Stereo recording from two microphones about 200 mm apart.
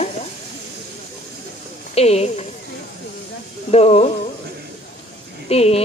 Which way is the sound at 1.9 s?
30° left (ahead or behind).